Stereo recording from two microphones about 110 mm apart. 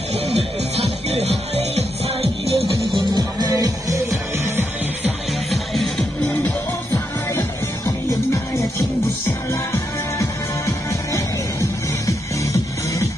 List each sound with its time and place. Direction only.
0.3 s music: 70° right (ahead or behind)
2.6 s music: centre (ahead or behind)
3.1 s music: 40° right (ahead or behind)
5.5 s music: centre (ahead or behind)
9.5 s music: 25° left (ahead or behind)